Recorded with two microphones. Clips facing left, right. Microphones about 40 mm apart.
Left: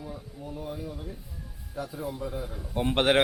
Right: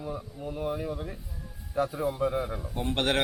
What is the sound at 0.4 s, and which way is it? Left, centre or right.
Speech, right.